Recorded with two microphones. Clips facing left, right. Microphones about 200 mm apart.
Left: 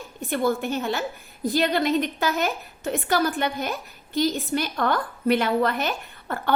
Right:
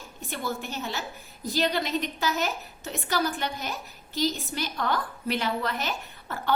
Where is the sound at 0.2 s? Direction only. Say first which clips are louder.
Left 9 dB; 55° left (ahead or behind).